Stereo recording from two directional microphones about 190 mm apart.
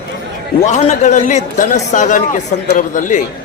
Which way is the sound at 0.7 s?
40° left (ahead or behind).